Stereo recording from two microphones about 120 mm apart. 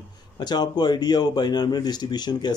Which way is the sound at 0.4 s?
35° left (ahead or behind).